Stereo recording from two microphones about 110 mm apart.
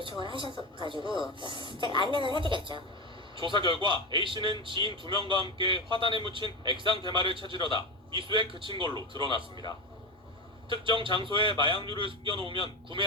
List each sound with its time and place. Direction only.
0.0 s a man's voice: 50° right (ahead or behind)
10.8 s a man's voice: 50° right (ahead or behind)